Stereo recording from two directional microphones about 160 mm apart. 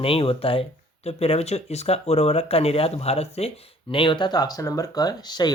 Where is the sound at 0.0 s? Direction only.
35° left (ahead or behind).